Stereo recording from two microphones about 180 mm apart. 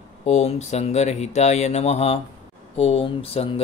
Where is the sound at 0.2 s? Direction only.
40° left (ahead or behind).